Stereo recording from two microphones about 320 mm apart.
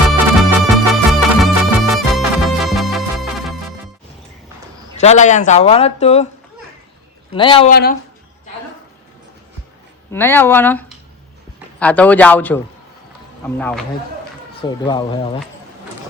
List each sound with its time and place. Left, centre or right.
0.1 s music: centre
4.9 s speech: left
7.3 s speech: centre
7.7 s speech: left
10.1 s a man's voice: centre
14.6 s speech: centre